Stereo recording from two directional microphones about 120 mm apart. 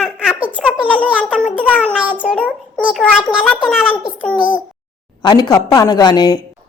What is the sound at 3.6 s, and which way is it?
Speech, 5° right (ahead or behind).